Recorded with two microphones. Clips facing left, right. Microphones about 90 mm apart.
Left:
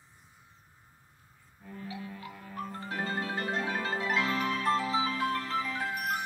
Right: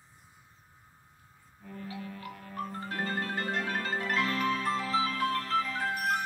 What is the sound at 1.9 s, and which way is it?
Music, 15° left (ahead or behind).